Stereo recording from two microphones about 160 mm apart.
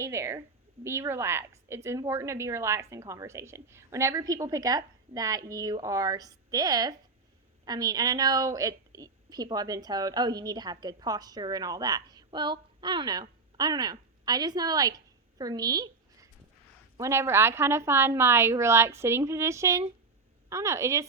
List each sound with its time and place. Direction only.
0.0 s a woman's voice: 15° right (ahead or behind)